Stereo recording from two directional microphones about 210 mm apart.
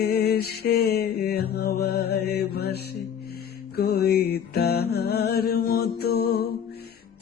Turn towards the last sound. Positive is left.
turn(degrees=50)  # may be behind; listen again after turning